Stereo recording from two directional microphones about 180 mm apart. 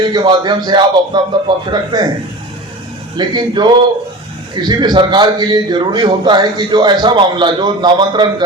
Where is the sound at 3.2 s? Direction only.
25° right (ahead or behind).